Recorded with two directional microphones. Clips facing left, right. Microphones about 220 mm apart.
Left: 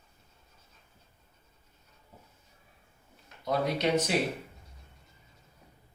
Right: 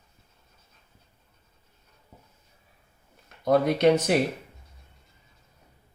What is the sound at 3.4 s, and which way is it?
Speech, 55° right (ahead or behind).